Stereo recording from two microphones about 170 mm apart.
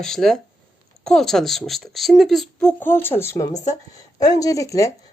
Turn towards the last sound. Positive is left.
turn(degrees=20)  # may be behind; listen again after turning